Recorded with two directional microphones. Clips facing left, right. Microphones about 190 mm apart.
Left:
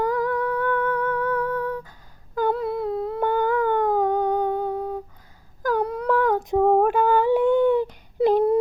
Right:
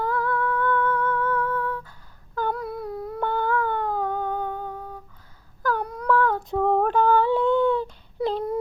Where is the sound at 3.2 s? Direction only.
15° left (ahead or behind).